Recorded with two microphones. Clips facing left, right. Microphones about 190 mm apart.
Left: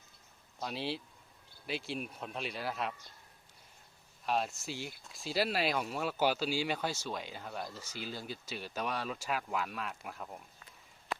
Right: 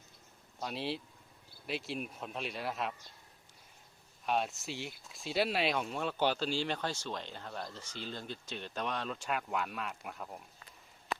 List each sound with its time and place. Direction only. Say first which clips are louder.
0.6 s speech: even; centre (ahead or behind)
4.3 s speech: even; centre (ahead or behind)